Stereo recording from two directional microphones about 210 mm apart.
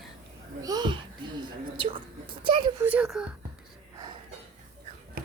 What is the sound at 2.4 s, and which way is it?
Speech, 20° right (ahead or behind).